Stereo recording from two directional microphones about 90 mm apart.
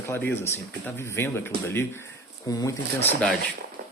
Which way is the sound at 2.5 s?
40° left (ahead or behind).